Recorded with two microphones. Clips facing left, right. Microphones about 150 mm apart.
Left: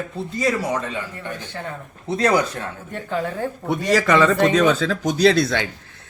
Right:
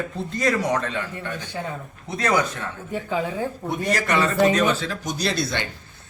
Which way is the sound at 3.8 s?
90° left.